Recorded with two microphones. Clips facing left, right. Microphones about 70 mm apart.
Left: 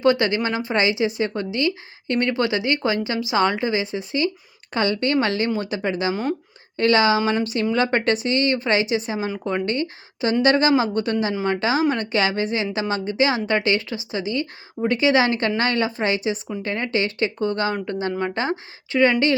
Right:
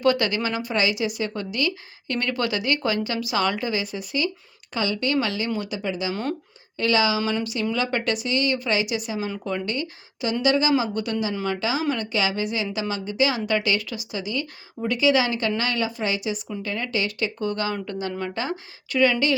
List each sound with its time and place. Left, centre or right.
0.0 s a woman's voice: left
4.7 s a woman's voice: left
9.1 s a woman's voice: left
9.6 s a woman's voice: left